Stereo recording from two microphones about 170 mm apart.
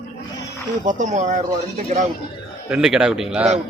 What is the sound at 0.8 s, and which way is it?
Speech, 50° right (ahead or behind).